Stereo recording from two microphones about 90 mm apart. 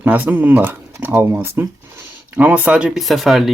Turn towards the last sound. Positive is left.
turn(degrees=0)  # may be behind; listen again after turning